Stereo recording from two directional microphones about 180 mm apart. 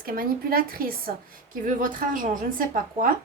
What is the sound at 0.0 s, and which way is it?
A woman's voice, 55° right (ahead or behind).